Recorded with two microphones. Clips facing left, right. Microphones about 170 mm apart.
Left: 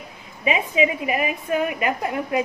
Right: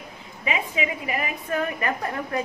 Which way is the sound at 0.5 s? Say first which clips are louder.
Left 6 dB; 20° left (ahead or behind).